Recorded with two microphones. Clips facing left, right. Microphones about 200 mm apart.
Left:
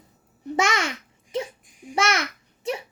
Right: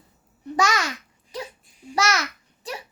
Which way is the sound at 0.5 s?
25° left (ahead or behind).